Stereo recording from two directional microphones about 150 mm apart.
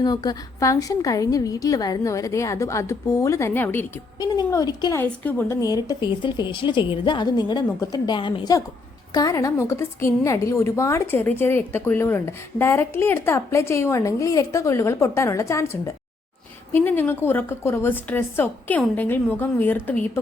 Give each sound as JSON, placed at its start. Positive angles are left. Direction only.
{"t": 0.0, "sound": "a woman's voice", "side_deg": 25}
{"t": 4.2, "sound": "a woman's voice", "side_deg": 25}
{"t": 5.0, "sound": "a woman's voice", "side_deg": 10}
{"t": 5.5, "sound": "a woman's voice", "side_deg": 25}
{"t": 9.1, "sound": "a woman's voice", "side_deg": 25}